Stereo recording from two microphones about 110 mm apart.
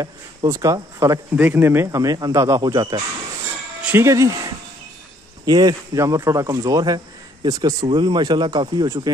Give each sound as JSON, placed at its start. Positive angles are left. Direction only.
{"t": 0.0, "sound": "speech", "side_deg": -30}
{"t": 1.3, "sound": "speech", "side_deg": -15}
{"t": 3.8, "sound": "speech", "side_deg": -20}
{"t": 5.4, "sound": "speech", "side_deg": -40}